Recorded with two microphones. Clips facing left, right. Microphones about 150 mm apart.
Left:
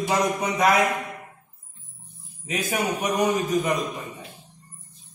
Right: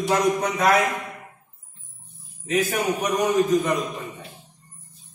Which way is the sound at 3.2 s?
10° left (ahead or behind).